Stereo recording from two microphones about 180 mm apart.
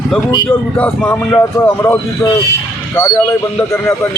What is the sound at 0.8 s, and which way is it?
Speech, 10° left (ahead or behind).